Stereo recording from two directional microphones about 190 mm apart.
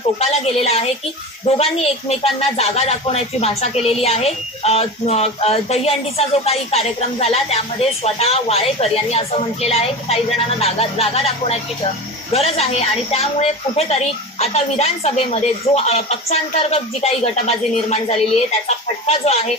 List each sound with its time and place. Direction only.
0.2 s speech: 35° left (ahead or behind)